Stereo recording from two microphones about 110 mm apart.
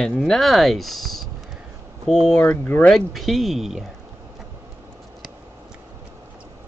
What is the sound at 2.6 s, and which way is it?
Speech, 15° left (ahead or behind).